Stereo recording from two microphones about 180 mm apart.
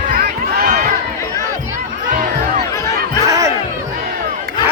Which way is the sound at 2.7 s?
20° left (ahead or behind).